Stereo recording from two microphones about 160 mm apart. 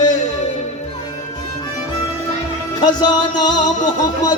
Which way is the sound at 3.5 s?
50° left (ahead or behind).